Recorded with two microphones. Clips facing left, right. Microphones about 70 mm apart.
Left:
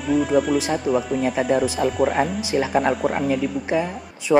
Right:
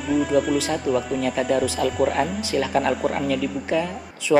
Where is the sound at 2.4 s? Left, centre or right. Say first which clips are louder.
Left 2 dB; centre.